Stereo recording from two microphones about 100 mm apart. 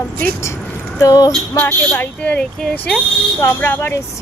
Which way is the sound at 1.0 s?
35° left (ahead or behind).